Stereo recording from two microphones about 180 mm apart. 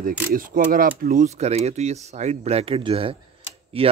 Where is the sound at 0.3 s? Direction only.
50° right (ahead or behind).